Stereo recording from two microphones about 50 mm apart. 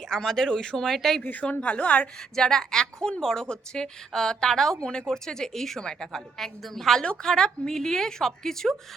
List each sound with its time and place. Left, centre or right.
0.1 s a woman's voice: centre
1.2 s a woman's voice: left
2.3 s a woman's voice: centre